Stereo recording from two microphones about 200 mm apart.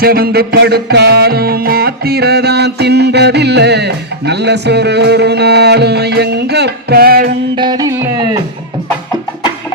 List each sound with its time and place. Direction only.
0.0 s music: 50° right (ahead or behind)
7.5 s music: 20° right (ahead or behind)